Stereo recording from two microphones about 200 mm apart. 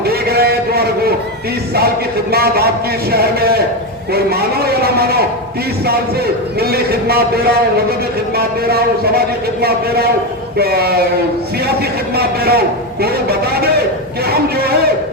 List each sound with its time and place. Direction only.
0.0 s a sound: 50° right (ahead or behind)
2.3 s a man's voice: 50° right (ahead or behind)
12.1 s a man's voice: 50° right (ahead or behind)